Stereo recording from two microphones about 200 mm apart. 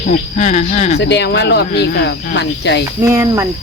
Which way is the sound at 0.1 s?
35° left (ahead or behind).